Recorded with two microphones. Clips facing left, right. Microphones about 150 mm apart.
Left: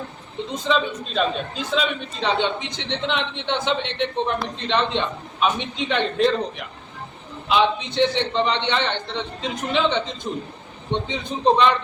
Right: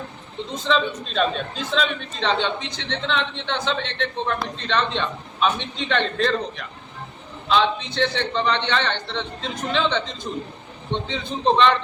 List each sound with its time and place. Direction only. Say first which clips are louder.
0.5 s a man's voice: even; 5° left (ahead or behind)
11.1 s a man's voice: left 1 dB; 10° left (ahead or behind)